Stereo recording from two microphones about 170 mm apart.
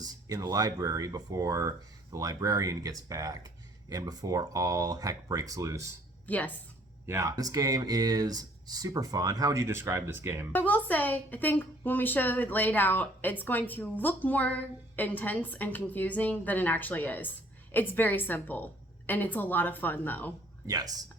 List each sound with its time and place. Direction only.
0.0 s speech: 20° right (ahead or behind)
6.2 s speech: 10° left (ahead or behind)
7.0 s speech: 15° right (ahead or behind)
10.5 s a woman's voice: 10° left (ahead or behind)
20.7 s speech: 20° right (ahead or behind)